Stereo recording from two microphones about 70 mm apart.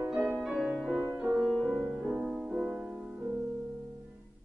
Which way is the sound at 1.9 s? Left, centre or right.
Centre.